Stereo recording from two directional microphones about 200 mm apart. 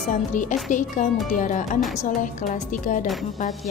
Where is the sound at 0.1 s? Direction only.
40° left (ahead or behind).